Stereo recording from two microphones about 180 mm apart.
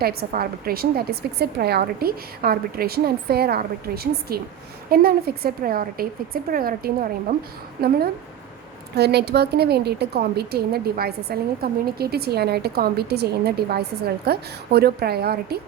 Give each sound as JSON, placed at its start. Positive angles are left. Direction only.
{"t": 0.0, "sound": "a woman's voice", "side_deg": -55}